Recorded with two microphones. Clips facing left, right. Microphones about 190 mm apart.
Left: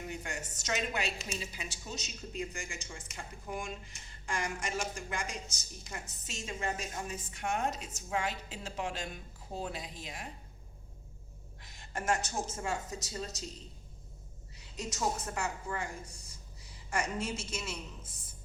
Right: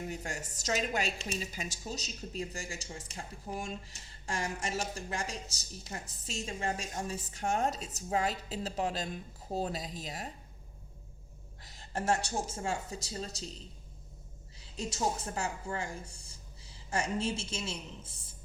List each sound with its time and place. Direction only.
0.1 s a woman's voice: 40° right (ahead or behind)
11.6 s a woman's voice: 35° right (ahead or behind)
14.8 s a woman's voice: 30° right (ahead or behind)
16.9 s a woman's voice: 30° right (ahead or behind)